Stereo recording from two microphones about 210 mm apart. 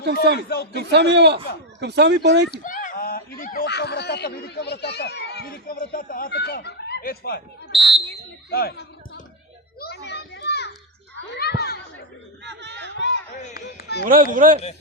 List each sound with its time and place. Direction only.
0.0 s speech: 50° right (ahead or behind)
0.3 s a man's voice: 45° left (ahead or behind)
0.7 s speech: 55° right (ahead or behind)
2.5 s speech: 40° left (ahead or behind)
9.8 s children playing: 50° left (ahead or behind)
12.5 s battle cry: 55° right (ahead or behind)
13.0 s a sound: 50° left (ahead or behind)
14.0 s speech: 40° right (ahead or behind)